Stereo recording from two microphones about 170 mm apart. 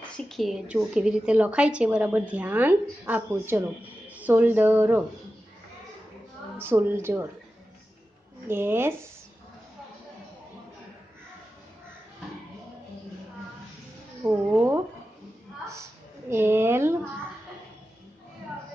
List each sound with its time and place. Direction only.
0.1 s a woman's voice: 5° left (ahead or behind)
6.6 s a woman's voice: 15° right (ahead or behind)
8.5 s a woman's voice: 15° right (ahead or behind)
14.2 s a woman's voice: 10° right (ahead or behind)
16.3 s a sound: 15° right (ahead or behind)